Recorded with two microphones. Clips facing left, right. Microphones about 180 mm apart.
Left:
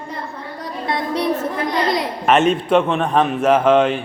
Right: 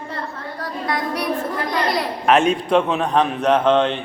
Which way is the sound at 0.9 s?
25° left (ahead or behind).